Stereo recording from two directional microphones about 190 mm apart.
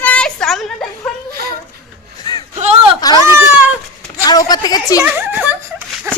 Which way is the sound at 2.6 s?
35° right (ahead or behind).